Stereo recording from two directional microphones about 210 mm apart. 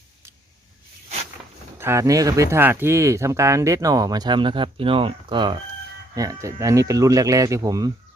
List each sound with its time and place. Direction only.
1.8 s speech: 15° right (ahead or behind)